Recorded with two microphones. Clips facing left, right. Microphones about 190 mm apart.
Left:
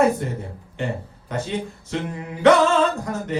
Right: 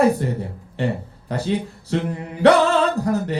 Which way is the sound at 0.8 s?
35° right (ahead or behind).